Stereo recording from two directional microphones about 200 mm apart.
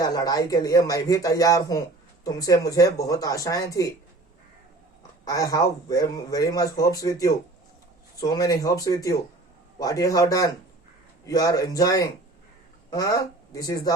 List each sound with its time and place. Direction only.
0.0 s speech: 20° left (ahead or behind)
5.2 s speech: 15° left (ahead or behind)